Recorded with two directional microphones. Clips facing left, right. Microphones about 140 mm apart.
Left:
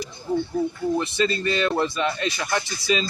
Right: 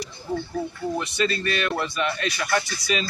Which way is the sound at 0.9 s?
30° left (ahead or behind).